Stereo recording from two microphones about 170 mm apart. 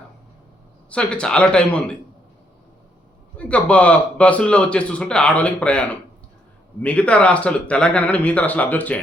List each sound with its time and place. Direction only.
0.9 s speech: 5° left (ahead or behind)
3.3 s speech: 5° left (ahead or behind)